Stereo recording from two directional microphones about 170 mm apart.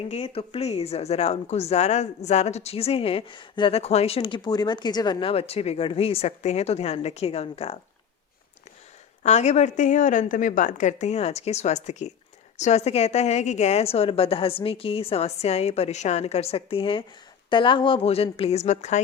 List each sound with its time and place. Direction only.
0.1 s speech: 35° left (ahead or behind)
9.2 s a woman's voice: 40° left (ahead or behind)